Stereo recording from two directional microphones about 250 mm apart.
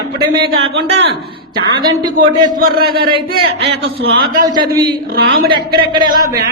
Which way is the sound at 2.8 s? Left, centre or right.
Right.